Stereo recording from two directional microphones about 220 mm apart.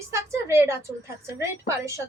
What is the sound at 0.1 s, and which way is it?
A woman's voice, 10° right (ahead or behind).